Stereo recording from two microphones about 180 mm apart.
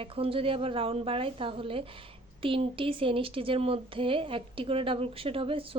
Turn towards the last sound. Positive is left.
turn(degrees=-30)  # may be behind; listen again after turning